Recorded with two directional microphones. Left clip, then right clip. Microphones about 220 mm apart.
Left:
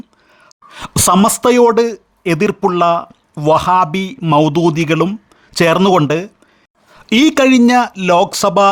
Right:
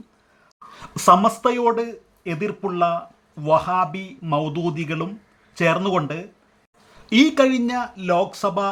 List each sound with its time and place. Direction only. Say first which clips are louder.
0.4 s speech: left 10 dB; 45° left (ahead or behind)
6.9 s speech: left 5 dB; 40° left (ahead or behind)